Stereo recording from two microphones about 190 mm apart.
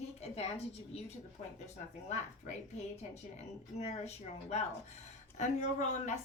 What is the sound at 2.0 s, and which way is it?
A woman's voice, 35° left (ahead or behind).